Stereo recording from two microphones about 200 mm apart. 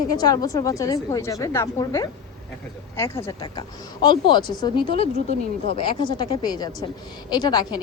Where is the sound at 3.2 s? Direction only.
20° left (ahead or behind).